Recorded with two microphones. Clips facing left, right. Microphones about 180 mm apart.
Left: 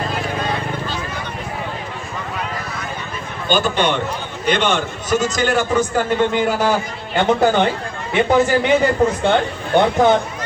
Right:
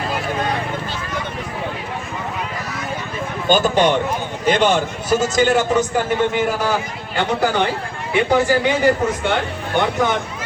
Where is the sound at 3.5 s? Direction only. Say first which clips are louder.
Right 3 dB; 45° right (ahead or behind); by 5.8 s 20° right (ahead or behind).